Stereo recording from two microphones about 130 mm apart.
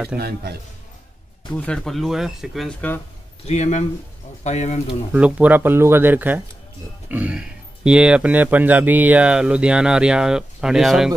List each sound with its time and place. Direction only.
0.1 s speech: 10° right (ahead or behind)
1.5 s speech: 10° left (ahead or behind)
3.4 s speech: 60° left (ahead or behind)
5.1 s speech: 10° right (ahead or behind)